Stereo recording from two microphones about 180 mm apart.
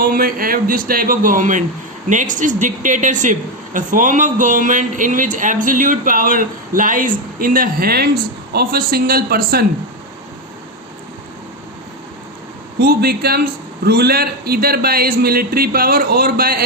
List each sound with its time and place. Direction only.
0.0 s speech: 50° right (ahead or behind)
12.8 s a man's voice: 60° right (ahead or behind)